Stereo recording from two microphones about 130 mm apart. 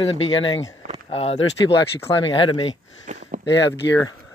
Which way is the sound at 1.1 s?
45° left (ahead or behind).